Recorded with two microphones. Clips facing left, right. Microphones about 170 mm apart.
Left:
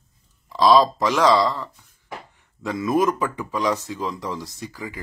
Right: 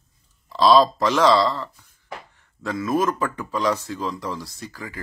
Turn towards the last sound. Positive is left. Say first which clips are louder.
# left 2 dB
turn(degrees=15)  # may be behind; listen again after turning